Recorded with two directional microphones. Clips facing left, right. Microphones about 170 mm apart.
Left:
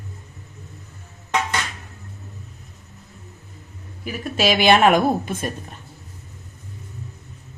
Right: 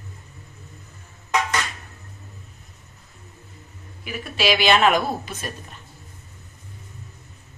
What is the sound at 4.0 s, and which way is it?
Speech, 45° left (ahead or behind).